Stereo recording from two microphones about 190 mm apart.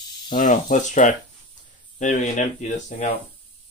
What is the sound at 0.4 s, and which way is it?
Speech, 40° left (ahead or behind).